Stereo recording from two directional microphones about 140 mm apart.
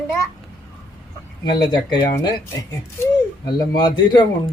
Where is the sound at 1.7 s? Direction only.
30° left (ahead or behind).